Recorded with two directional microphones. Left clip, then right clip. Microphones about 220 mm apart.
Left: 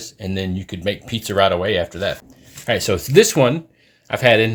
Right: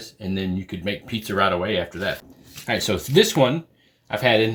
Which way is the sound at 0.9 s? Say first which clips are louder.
Left 5 dB; 50° left (ahead or behind).